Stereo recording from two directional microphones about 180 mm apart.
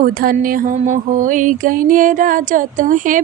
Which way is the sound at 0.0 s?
50° right (ahead or behind).